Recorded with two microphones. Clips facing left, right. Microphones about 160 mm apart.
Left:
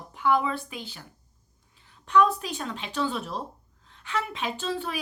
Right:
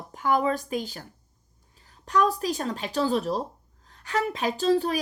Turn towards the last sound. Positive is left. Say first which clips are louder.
# right 8 dB
turn(degrees=-40)  # may be behind; listen again after turning